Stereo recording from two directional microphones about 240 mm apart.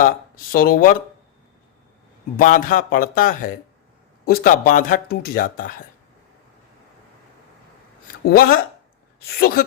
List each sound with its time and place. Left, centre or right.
0.5 s speech: left
2.4 s speech: left
8.2 s speech: left